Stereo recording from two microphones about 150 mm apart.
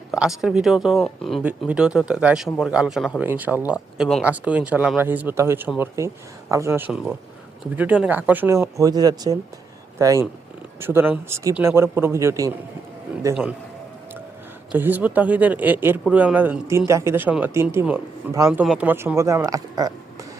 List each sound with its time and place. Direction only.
0.1 s speech: 5° right (ahead or behind); by 13.4 s 20° right (ahead or behind)
14.7 s speech: 10° right (ahead or behind)
18.6 s speech: 5° right (ahead or behind); by 19.9 s 25° right (ahead or behind)